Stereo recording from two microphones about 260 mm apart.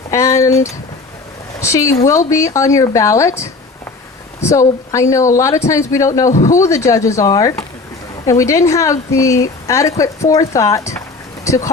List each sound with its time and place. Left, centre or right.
0.1 s speech: centre
1.6 s speech: centre
6.3 s speech: left
6.6 s speech: centre